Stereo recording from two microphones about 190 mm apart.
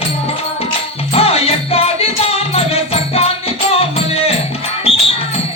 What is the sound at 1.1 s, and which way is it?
Music, 30° left (ahead or behind).